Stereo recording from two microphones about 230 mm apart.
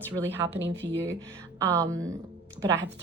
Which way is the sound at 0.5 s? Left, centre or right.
Right.